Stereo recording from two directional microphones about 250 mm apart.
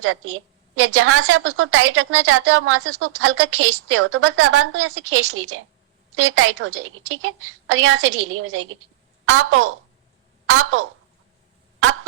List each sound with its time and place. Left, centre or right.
0.0 s a woman's voice: right